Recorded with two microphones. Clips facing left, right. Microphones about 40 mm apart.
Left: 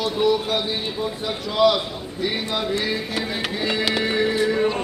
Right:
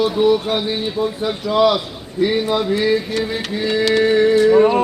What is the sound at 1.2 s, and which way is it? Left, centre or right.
Music, centre.